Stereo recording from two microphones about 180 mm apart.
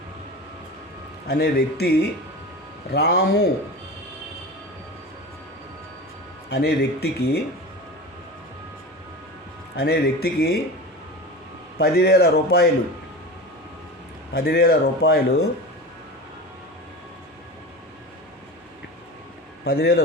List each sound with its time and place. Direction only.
1.3 s speech: 60° left (ahead or behind)
6.5 s speech: 60° left (ahead or behind)
9.7 s speech: 60° left (ahead or behind)
11.8 s speech: 60° left (ahead or behind)
14.3 s speech: 60° left (ahead or behind)
19.6 s speech: 65° left (ahead or behind)